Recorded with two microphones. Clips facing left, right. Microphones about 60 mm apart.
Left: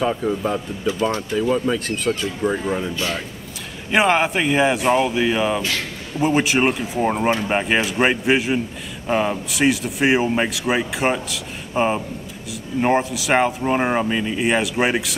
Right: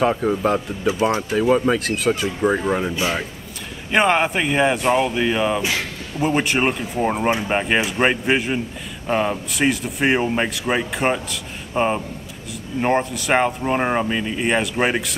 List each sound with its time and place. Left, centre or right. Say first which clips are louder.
0.2 s speech: right 3 dB; centre
1.8 s speech: right 2 dB; centre
2.1 s speech: right 2 dB; centre
3.9 s speech: even; centre
5.6 s speech: right 1 dB; centre
6.1 s speech: left 2 dB; centre